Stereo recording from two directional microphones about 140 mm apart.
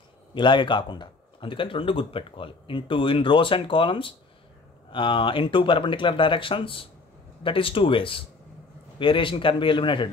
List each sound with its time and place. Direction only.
0.3 s speech: 35° left (ahead or behind)